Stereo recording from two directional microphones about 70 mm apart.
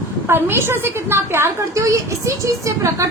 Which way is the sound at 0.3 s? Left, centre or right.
Right.